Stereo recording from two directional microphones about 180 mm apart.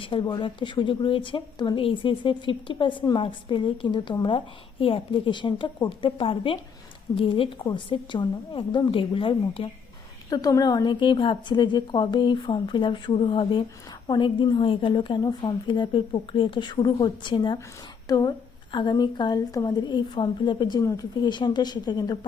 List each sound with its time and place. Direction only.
0.0 s speech: 30° left (ahead or behind)
10.2 s speech: 20° left (ahead or behind)